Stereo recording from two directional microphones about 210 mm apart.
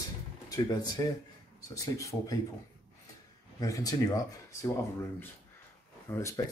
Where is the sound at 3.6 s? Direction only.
15° left (ahead or behind).